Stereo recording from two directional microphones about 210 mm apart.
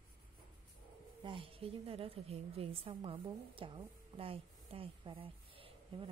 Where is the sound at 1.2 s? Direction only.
25° right (ahead or behind).